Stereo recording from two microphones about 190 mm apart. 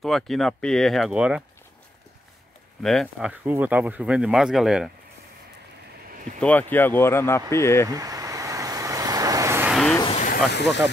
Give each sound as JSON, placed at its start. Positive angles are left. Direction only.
{"t": 0.0, "sound": "speech", "side_deg": 0}
{"t": 2.8, "sound": "speech", "side_deg": 0}
{"t": 6.4, "sound": "speech", "side_deg": 10}
{"t": 7.9, "sound": "waves", "side_deg": -20}
{"t": 10.1, "sound": "vehicle", "side_deg": 45}